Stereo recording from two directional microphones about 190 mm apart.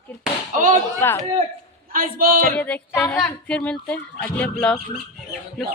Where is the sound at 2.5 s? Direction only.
5° left (ahead or behind).